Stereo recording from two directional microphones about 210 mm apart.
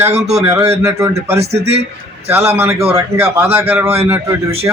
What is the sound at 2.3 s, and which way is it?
A man's voice, 10° right (ahead or behind).